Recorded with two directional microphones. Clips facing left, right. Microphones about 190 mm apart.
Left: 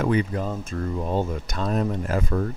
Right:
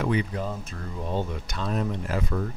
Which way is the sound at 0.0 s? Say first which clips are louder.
Left 3 dB; 45° left (ahead or behind).